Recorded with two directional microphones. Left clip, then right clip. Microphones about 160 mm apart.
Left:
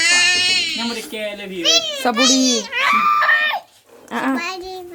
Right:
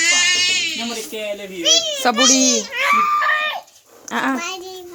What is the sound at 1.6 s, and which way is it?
Speech, 45° left (ahead or behind).